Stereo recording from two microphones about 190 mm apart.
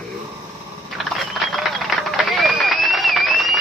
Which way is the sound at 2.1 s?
Centre (ahead or behind).